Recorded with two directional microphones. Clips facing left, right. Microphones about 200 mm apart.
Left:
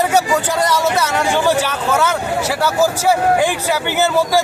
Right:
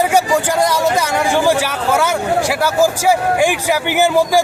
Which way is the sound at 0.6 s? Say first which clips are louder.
Right 1 dB; 10° right (ahead or behind).